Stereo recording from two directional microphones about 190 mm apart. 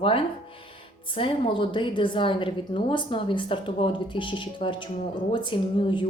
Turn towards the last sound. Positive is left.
turn(degrees=25)  # may be behind; listen again after turning